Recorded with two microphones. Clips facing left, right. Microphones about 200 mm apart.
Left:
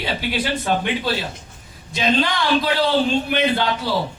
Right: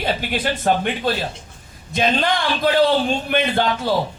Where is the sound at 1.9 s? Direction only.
50° right (ahead or behind).